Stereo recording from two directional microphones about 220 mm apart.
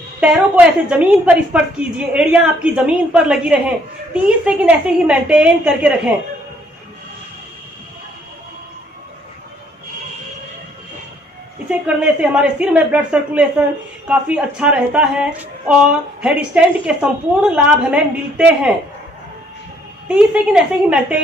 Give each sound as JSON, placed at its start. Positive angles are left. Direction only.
{"t": 0.2, "sound": "a woman's voice", "side_deg": -5}
{"t": 11.7, "sound": "a woman's voice", "side_deg": -5}
{"t": 20.1, "sound": "a woman's voice", "side_deg": -5}